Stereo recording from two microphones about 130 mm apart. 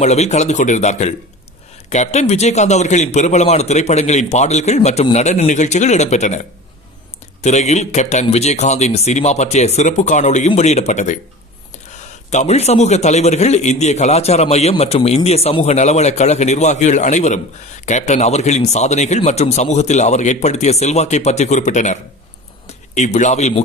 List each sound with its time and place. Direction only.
0.0 s a man's voice: 60° left (ahead or behind)
7.4 s a man's voice: 60° left (ahead or behind)
12.3 s a man's voice: 60° left (ahead or behind)
22.9 s a man's voice: 65° left (ahead or behind)